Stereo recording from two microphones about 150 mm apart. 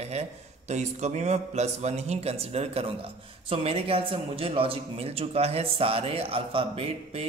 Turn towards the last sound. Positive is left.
turn(degrees=-40)  # may be behind; listen again after turning